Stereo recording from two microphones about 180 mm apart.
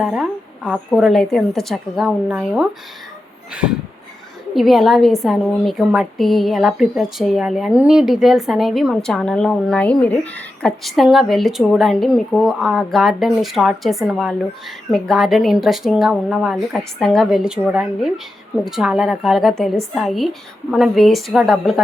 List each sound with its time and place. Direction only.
0.0 s a woman's voice: centre (ahead or behind)